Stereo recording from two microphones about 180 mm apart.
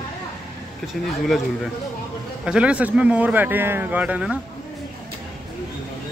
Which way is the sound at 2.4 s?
5° right (ahead or behind).